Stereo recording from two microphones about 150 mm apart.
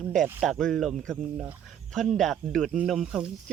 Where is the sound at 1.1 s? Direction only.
10° right (ahead or behind).